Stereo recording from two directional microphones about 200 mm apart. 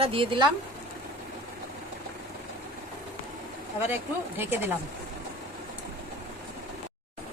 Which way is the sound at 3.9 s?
10° right (ahead or behind).